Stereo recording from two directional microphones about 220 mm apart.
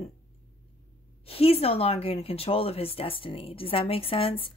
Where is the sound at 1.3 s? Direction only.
25° left (ahead or behind).